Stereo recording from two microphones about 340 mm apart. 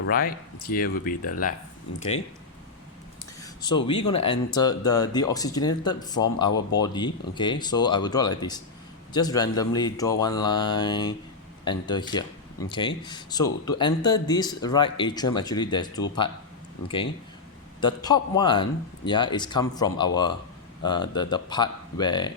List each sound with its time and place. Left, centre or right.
0.0 s speech: left
3.6 s speech: centre
17.7 s speech: centre